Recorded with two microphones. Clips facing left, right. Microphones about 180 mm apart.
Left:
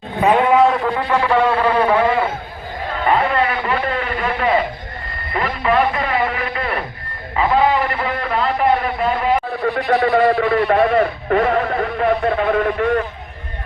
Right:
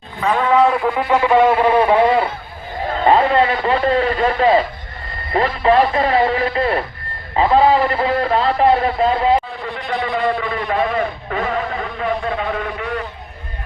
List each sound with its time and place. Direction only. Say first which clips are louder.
0.2 s speech: left 4 dB; 20° left (ahead or behind)
0.5 s a man's voice: right 3 dB; centre (ahead or behind)
0.9 s speech: right 3 dB; 15° right (ahead or behind)
3.0 s a sound: right 3 dB; 30° right (ahead or behind)
5.3 s a man's voice: right 4 dB; 30° right (ahead or behind)
9.6 s a man's voice: left 7 dB; 60° left (ahead or behind)